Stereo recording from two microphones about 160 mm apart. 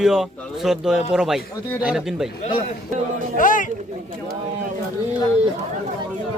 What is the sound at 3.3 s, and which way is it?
Speech, 55° left (ahead or behind).